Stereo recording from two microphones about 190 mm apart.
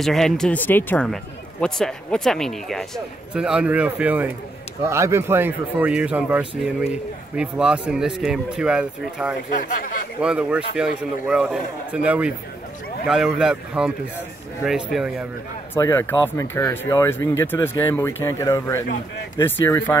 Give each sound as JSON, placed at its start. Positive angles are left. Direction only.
{"t": 0.0, "sound": "speech", "side_deg": 0}
{"t": 15.7, "sound": "speech", "side_deg": 15}